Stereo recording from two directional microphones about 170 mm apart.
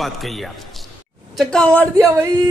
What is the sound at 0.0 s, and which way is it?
A man's voice, centre (ahead or behind).